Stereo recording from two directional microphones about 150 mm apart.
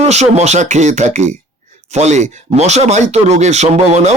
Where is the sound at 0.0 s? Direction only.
45° right (ahead or behind).